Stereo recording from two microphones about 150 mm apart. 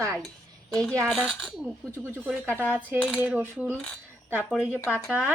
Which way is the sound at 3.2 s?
10° right (ahead or behind).